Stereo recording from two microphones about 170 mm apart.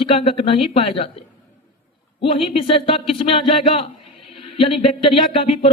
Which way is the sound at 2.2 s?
30° left (ahead or behind).